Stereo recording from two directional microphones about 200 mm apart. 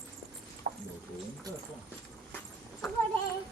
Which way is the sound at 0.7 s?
45° right (ahead or behind).